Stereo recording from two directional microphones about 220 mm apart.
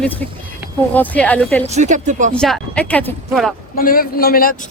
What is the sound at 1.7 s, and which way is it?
Speech, 30° right (ahead or behind).